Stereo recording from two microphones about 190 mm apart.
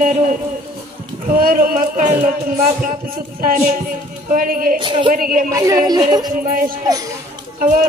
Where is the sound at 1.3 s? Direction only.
50° right (ahead or behind).